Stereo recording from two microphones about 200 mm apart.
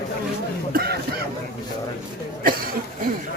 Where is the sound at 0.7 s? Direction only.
50° right (ahead or behind).